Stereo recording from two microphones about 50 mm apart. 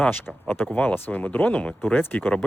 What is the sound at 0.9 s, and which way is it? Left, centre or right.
Speech, left.